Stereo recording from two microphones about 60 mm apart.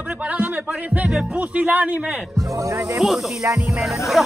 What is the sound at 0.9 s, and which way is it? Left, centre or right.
Music, centre.